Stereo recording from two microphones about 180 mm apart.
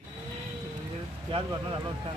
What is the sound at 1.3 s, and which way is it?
Speech, 25° right (ahead or behind).